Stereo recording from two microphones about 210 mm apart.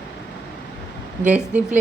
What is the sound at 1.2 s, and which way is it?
Speech, 5° right (ahead or behind).